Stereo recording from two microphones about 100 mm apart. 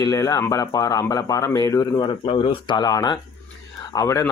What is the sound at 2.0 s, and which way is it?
Speech, 55° left (ahead or behind).